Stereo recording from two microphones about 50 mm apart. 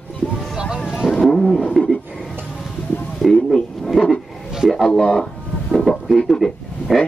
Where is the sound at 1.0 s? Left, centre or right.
Centre.